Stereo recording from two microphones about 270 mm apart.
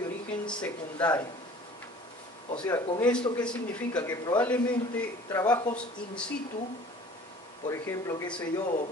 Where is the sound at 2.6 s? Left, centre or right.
Centre.